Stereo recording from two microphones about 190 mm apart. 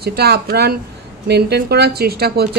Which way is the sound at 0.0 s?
55° right (ahead or behind).